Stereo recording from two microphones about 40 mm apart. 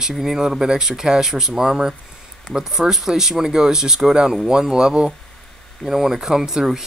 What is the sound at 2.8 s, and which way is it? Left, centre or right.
Speech, centre.